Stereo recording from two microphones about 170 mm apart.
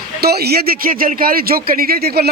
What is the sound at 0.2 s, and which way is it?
A man's voice, 70° right (ahead or behind).